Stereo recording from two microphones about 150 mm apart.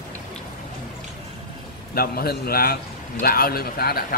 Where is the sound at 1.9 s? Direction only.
90° left.